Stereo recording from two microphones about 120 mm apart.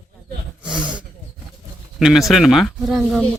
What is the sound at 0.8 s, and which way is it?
Roaring cats, 40° right (ahead or behind).